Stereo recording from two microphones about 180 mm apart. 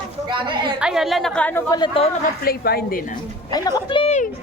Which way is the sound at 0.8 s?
5° right (ahead or behind).